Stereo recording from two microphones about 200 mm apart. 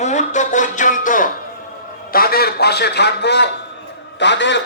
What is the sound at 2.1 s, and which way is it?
A man's voice, 50° left (ahead or behind).